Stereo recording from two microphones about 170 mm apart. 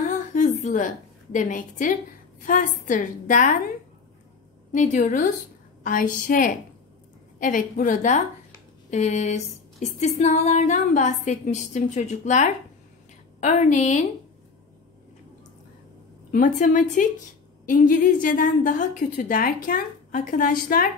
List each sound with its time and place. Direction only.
0.3 s a woman's voice: 45° left (ahead or behind)
2.4 s female singing: 50° left (ahead or behind)
4.7 s female singing: 45° left (ahead or behind)
16.3 s female singing: 50° left (ahead or behind)